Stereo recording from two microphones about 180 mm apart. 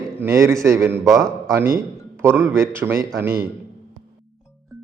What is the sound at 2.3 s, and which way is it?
Speech, 15° right (ahead or behind).